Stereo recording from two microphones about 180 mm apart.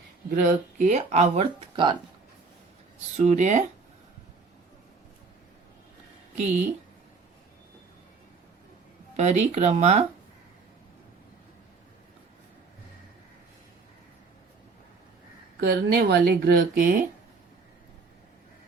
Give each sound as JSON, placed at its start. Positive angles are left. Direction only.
{"t": 0.3, "sound": "speech", "side_deg": -50}
{"t": 3.2, "sound": "speech", "side_deg": -40}
{"t": 9.1, "sound": "speech", "side_deg": -40}
{"t": 15.6, "sound": "speech", "side_deg": -55}